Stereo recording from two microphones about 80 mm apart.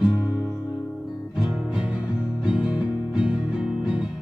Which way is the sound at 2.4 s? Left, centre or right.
Centre.